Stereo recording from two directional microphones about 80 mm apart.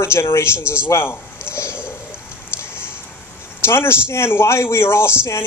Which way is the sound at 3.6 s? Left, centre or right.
Left.